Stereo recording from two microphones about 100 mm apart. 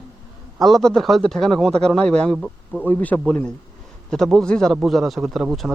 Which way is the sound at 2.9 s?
15° left (ahead or behind).